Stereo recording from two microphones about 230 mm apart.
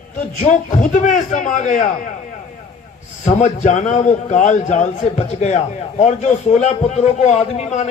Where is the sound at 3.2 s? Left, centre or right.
Left.